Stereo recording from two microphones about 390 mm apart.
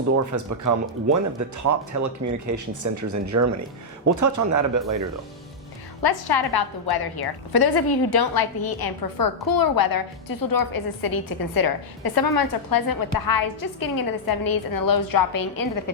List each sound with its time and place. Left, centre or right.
0.3 s speech: right
6.0 s a woman's voice: left